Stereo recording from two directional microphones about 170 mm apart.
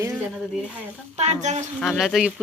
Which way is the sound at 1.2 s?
45° right (ahead or behind).